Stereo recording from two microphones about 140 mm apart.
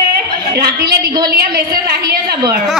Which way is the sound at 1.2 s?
90° right.